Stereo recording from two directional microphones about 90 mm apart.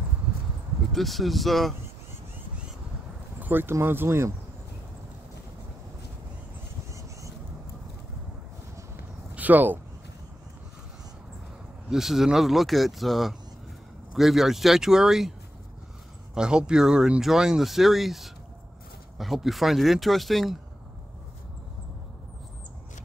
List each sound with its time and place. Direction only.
0.9 s speech: centre (ahead or behind)
3.3 s speech: 20° right (ahead or behind)
9.3 s a sound: 20° right (ahead or behind)
11.9 s speech: 5° right (ahead or behind)
16.3 s speech: 10° right (ahead or behind)